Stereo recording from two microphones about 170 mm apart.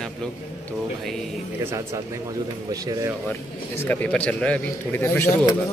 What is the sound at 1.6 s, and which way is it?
Speech, 15° right (ahead or behind).